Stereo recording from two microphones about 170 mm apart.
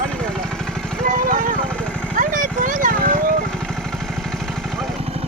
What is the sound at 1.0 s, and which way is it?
Vehicle, 50° right (ahead or behind).